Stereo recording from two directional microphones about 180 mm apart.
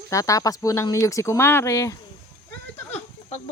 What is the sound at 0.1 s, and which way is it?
Speech, 20° left (ahead or behind).